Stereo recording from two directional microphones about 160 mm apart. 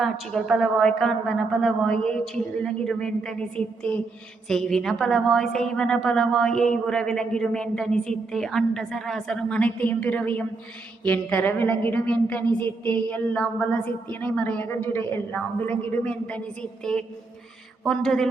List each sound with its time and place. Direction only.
0.0 s a woman's voice: centre (ahead or behind)
17.8 s a woman's voice: centre (ahead or behind)